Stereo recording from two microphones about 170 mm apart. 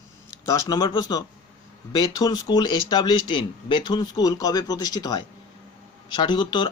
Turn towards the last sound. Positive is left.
turn(degrees=25)  # may be behind; listen again after turning